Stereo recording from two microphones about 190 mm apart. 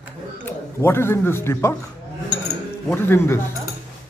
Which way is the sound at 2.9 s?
10° left (ahead or behind).